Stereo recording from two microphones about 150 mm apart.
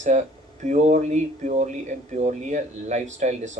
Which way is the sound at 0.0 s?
50° right (ahead or behind).